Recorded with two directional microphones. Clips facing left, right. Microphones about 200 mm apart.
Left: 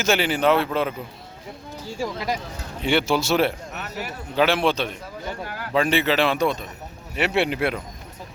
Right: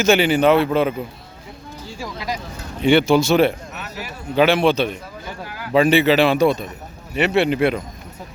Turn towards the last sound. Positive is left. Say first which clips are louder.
# right 5 dB
turn(degrees=5)  # may be behind; listen again after turning